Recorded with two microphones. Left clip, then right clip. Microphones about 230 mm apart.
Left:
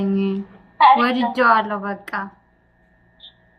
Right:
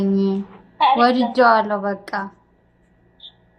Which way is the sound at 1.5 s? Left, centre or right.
Centre.